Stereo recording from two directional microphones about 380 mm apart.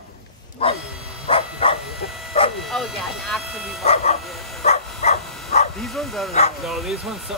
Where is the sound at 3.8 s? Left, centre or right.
Centre.